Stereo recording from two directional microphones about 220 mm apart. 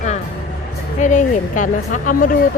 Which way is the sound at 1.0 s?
35° left (ahead or behind).